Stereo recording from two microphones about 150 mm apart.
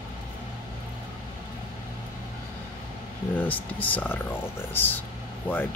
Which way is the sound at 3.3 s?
10° left (ahead or behind).